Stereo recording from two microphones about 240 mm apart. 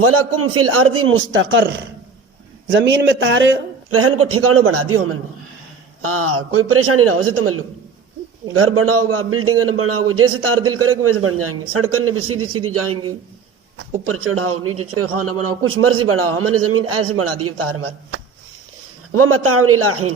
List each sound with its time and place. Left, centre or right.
0.0 s a man's voice: right
2.6 s a man's voice: right
14.0 s a man's voice: right
19.1 s a man's voice: right